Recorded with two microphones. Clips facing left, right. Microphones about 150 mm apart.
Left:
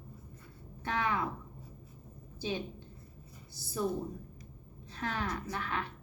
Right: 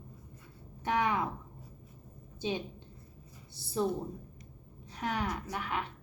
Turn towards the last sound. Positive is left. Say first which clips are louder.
# right 1 dB
turn(degrees=-15)  # may be behind; listen again after turning